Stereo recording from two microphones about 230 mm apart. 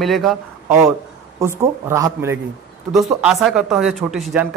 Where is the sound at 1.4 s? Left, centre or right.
Centre.